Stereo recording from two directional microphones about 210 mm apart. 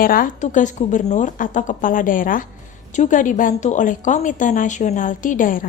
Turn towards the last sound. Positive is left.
turn(degrees=40)  # may be behind; listen again after turning